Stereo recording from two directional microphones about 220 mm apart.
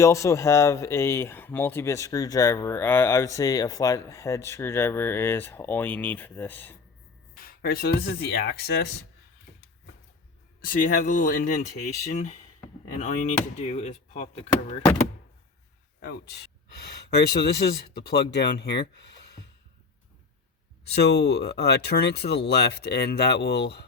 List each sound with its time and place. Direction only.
0.0 s speech: 15° left (ahead or behind)
7.3 s speech: 40° left (ahead or behind)
10.6 s speech: 40° left (ahead or behind)
16.0 s speech: 50° left (ahead or behind)
20.9 s speech: 50° left (ahead or behind)